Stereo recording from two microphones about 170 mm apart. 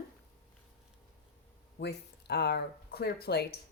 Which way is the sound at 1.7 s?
75° left (ahead or behind).